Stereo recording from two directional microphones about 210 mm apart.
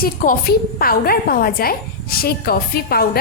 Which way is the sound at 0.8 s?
45° left (ahead or behind).